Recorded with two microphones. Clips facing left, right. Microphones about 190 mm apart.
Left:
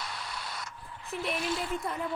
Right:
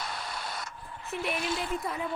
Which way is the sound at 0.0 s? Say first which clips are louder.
Right 3 dB; 50° right (ahead or behind).